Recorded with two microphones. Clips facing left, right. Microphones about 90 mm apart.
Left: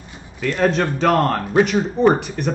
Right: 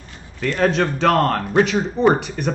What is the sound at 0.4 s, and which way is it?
Speech, 5° left (ahead or behind).